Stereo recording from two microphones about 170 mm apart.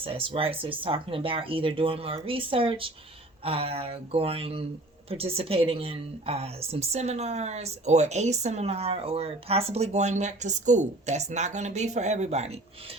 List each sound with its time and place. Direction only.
0.0 s a woman's voice: 30° right (ahead or behind)